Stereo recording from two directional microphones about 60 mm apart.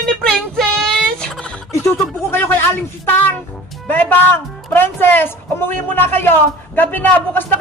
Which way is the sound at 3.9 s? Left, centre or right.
Left.